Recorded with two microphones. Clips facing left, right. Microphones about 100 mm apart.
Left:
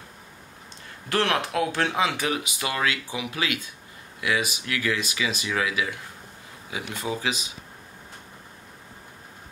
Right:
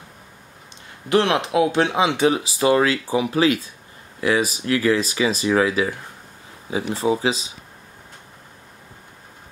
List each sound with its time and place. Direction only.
1.0 s speech: 20° right (ahead or behind)